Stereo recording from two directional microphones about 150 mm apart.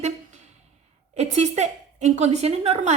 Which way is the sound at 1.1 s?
50° right (ahead or behind).